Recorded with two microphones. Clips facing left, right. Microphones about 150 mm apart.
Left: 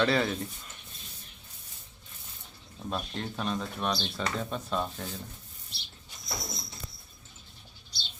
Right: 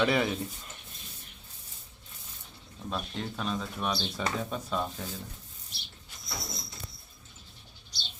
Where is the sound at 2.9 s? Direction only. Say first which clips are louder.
Left 1 dB; centre (ahead or behind).